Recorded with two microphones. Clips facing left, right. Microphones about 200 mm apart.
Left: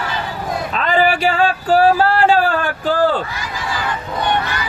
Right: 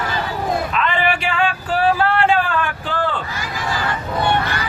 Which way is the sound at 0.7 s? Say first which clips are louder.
Left 4 dB; 40° left (ahead or behind).